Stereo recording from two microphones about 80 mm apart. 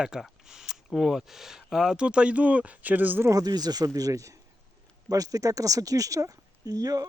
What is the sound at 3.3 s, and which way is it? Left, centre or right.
Speech, right.